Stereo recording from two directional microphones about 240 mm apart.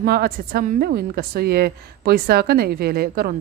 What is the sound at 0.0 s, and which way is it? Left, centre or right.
A woman's voice, right.